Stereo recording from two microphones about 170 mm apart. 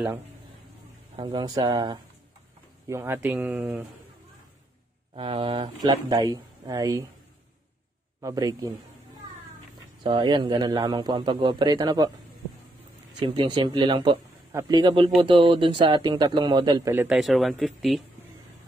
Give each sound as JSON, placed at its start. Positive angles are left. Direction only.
{"t": 1.1, "sound": "a man's voice", "side_deg": -25}
{"t": 5.1, "sound": "a man's voice", "side_deg": -30}
{"t": 8.2, "sound": "a man's voice", "side_deg": -20}
{"t": 10.0, "sound": "a man's voice", "side_deg": -30}
{"t": 13.2, "sound": "a man's voice", "side_deg": -25}
{"t": 17.1, "sound": "speech", "side_deg": 0}